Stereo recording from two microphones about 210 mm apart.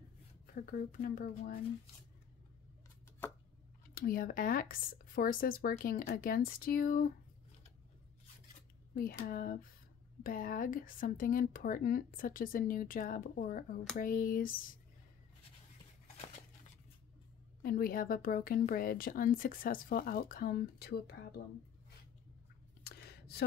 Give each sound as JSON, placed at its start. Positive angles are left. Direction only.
{"t": 0.6, "sound": "a woman's voice", "side_deg": 40}
{"t": 3.9, "sound": "a woman's voice", "side_deg": 45}
{"t": 8.9, "sound": "a woman's voice", "side_deg": 45}
{"t": 17.6, "sound": "a woman's voice", "side_deg": 45}
{"t": 22.8, "sound": "a sound", "side_deg": 50}